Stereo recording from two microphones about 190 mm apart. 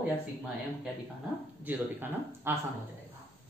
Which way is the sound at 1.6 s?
10° right (ahead or behind).